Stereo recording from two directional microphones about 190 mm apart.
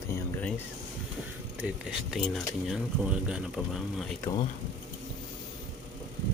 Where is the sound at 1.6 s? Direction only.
5° right (ahead or behind).